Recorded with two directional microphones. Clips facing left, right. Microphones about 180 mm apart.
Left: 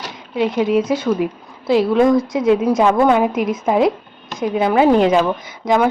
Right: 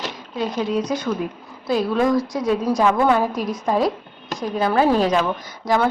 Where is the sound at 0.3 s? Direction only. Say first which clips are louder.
Left 6 dB; 20° left (ahead or behind).